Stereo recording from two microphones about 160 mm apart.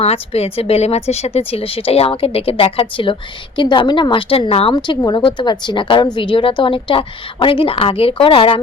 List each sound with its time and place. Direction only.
0.0 s speech: 40° left (ahead or behind)
4.7 s speech: 25° left (ahead or behind)